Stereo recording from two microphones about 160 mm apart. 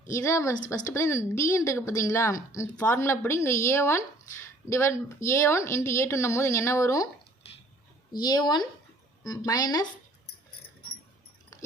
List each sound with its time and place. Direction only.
0.1 s a woman's voice: 15° left (ahead or behind)
8.2 s a woman's voice: 25° left (ahead or behind)